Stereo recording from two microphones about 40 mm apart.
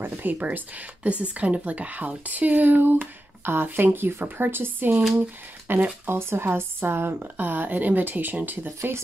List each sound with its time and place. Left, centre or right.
0.0 s a sound: right
0.6 s a woman's voice: right
6.0 s a woman's voice: right